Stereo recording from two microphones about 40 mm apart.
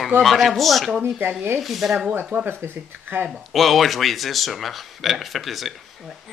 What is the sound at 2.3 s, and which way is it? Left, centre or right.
Speech, right.